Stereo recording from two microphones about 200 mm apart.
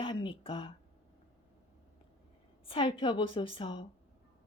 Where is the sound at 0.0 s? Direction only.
25° left (ahead or behind).